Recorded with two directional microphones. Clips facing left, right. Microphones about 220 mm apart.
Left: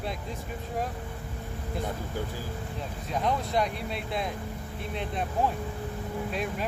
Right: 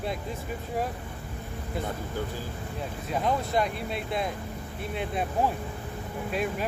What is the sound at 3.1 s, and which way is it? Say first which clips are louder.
Speech: right 1 dB; centre (ahead or behind).